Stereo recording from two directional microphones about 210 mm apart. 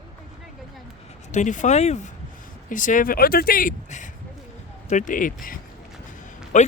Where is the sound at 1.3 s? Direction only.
35° left (ahead or behind).